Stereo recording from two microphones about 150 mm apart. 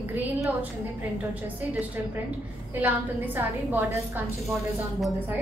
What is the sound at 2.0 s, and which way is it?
A woman's voice, 10° right (ahead or behind).